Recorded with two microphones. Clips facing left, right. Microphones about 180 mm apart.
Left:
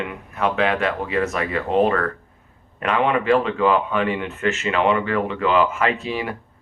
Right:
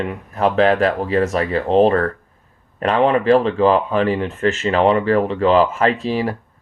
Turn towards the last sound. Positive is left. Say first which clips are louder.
# right 5 dB
turn(degrees=-35)  # may be behind; listen again after turning